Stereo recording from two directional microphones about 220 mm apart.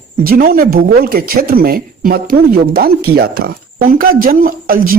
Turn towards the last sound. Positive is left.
turn(degrees=-40)  # may be behind; listen again after turning